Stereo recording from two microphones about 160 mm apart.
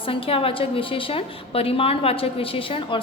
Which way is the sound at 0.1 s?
35° left (ahead or behind).